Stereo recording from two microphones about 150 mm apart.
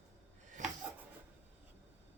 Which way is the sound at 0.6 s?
55° right (ahead or behind).